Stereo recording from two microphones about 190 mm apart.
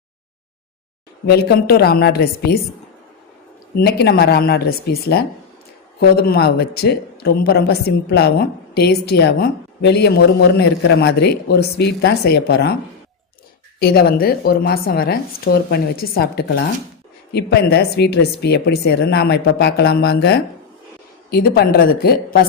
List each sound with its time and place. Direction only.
1.3 s a woman's voice: 55° left (ahead or behind)
3.8 s a woman's voice: 55° left (ahead or behind)
13.7 s a woman's voice: 55° left (ahead or behind)